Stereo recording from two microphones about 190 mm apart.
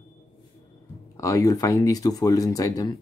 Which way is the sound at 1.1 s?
15° left (ahead or behind).